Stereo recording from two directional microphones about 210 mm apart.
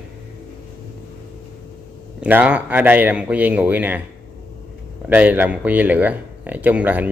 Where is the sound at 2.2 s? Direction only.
5° right (ahead or behind).